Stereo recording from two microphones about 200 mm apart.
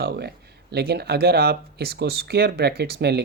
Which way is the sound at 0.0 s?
55° right (ahead or behind).